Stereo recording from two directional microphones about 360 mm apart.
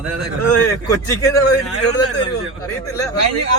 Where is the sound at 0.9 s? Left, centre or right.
Centre.